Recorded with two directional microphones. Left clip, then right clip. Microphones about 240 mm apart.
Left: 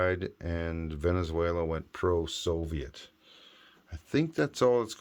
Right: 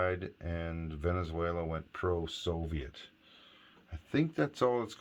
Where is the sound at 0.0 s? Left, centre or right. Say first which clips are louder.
Left 4 dB; left.